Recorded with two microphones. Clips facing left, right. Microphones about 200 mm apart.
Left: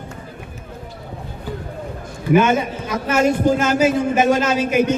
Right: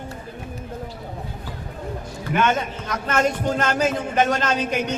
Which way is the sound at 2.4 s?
10° left (ahead or behind).